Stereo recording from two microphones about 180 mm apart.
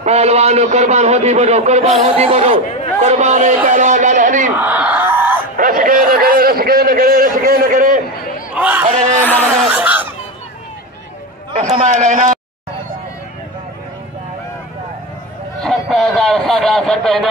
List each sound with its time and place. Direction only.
0.0 s a man's voice: 35° right (ahead or behind)
4.6 s a sound: 10° right (ahead or behind)
5.6 s a man's voice: 55° right (ahead or behind)
8.5 s speech: 10° right (ahead or behind)
8.8 s a man's voice: 40° right (ahead or behind)
9.2 s speech: 10° left (ahead or behind)
9.7 s speech: 10° right (ahead or behind)
11.5 s a man's voice: 35° right (ahead or behind)
15.6 s speech: centre (ahead or behind)